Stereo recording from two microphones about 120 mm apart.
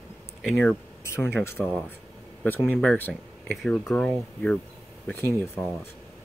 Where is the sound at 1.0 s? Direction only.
20° left (ahead or behind).